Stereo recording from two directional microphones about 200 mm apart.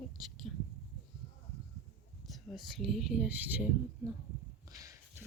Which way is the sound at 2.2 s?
Centre (ahead or behind).